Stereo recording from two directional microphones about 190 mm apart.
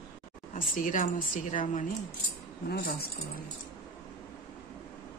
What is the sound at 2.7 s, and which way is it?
Speech, 55° left (ahead or behind).